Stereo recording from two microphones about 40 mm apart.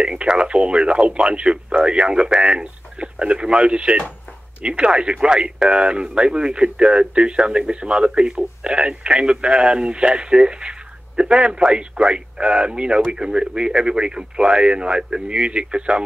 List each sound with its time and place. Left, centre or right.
0.0 s speech: right